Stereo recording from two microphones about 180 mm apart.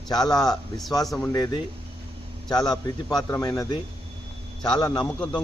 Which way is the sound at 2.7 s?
20° left (ahead or behind).